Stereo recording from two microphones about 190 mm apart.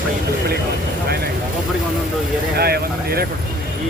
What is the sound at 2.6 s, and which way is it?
Speech, 55° right (ahead or behind).